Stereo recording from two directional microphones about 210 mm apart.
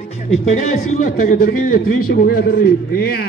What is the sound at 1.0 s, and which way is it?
A man's voice, 40° left (ahead or behind).